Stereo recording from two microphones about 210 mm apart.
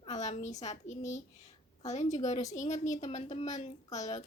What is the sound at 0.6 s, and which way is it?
A woman's voice, 35° left (ahead or behind).